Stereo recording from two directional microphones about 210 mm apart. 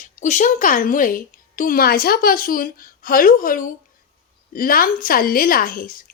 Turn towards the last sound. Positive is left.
turn(degrees=40)  # may be behind; listen again after turning